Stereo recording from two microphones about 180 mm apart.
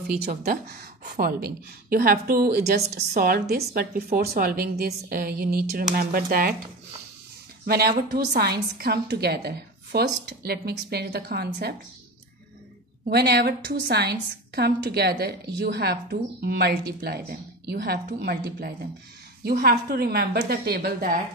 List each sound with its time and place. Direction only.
0.1 s a woman's voice: 55° right (ahead or behind)
7.6 s a woman's voice: 55° right (ahead or behind)
13.0 s a woman's voice: 60° right (ahead or behind)